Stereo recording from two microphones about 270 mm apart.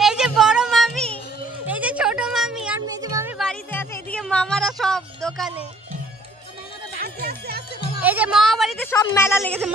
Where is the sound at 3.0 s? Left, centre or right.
Centre.